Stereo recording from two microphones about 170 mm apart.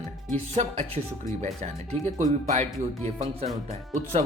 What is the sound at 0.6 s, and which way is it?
Speech, 40° right (ahead or behind).